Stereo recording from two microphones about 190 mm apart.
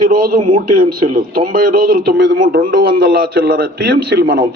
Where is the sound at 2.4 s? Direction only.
45° right (ahead or behind).